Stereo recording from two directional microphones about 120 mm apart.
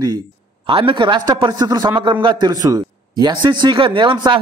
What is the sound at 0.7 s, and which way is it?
A man's voice, 45° right (ahead or behind).